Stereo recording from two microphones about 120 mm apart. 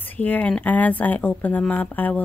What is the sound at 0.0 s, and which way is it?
Speech, 15° left (ahead or behind).